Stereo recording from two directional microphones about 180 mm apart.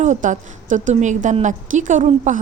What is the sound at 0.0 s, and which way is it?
A woman's voice, 45° right (ahead or behind).